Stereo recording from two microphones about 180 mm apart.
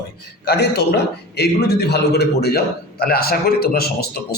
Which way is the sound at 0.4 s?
60° left (ahead or behind).